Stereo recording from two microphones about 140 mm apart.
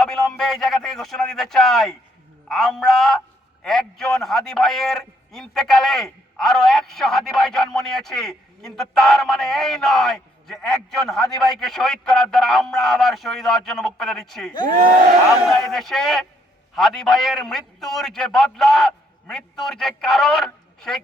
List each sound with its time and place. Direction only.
0.0 s a man's voice: 5° left (ahead or behind)